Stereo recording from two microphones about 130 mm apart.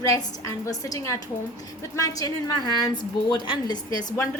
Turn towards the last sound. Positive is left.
turn(degrees=30)  # may be behind; listen again after turning